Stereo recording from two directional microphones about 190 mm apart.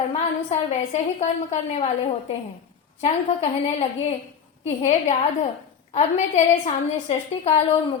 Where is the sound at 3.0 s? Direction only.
35° left (ahead or behind).